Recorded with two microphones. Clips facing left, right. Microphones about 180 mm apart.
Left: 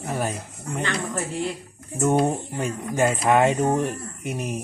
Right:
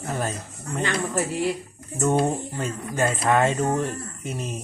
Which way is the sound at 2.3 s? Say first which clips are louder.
Left 1 dB; 15° left (ahead or behind).